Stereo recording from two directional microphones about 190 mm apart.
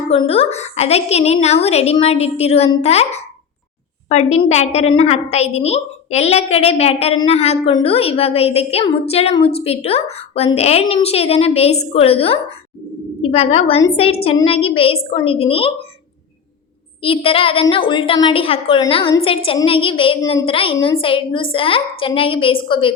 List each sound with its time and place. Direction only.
0.1 s a woman's voice: 30° left (ahead or behind)
17.0 s a woman's voice: 30° left (ahead or behind)
20.7 s a woman's voice: 15° left (ahead or behind)